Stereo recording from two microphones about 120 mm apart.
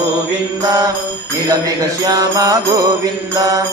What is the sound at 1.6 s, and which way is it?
Music, 30° right (ahead or behind).